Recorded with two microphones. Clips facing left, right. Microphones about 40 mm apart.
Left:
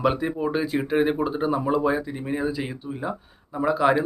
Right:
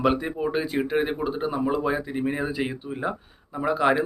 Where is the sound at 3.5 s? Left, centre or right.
Centre.